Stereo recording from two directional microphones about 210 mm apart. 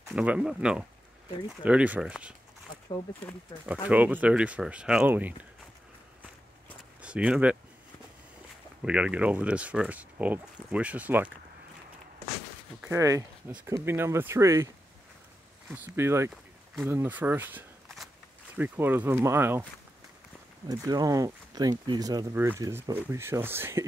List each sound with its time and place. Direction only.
0.1 s speech: 5° right (ahead or behind)
3.5 s speech: 20° left (ahead or behind)
3.9 s speech: 5° right (ahead or behind)
7.0 s speech: 5° right (ahead or behind)
8.8 s speech: 5° right (ahead or behind)
12.8 s speech: 15° right (ahead or behind)
15.7 s speech: 10° right (ahead or behind)
20.6 s speech: 15° right (ahead or behind)